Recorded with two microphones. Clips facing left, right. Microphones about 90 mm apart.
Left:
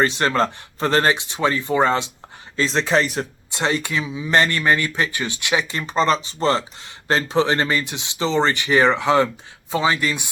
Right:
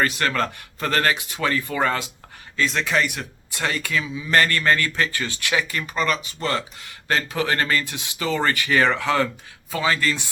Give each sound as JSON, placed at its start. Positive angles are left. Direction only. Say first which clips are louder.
{"t": 0.0, "sound": "speech", "louder": "left 4 dB", "side_deg": 25}